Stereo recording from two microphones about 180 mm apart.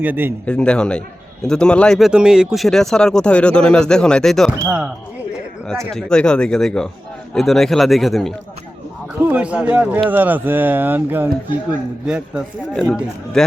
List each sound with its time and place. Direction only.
0.0 s speech: 10° right (ahead or behind)
0.4 s a man's voice: 5° left (ahead or behind)
4.6 s speech: 15° right (ahead or behind)
5.9 s a man's voice: 5° left (ahead or behind)